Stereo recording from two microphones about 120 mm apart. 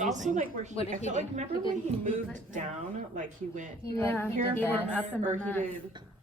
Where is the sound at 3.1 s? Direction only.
90° right.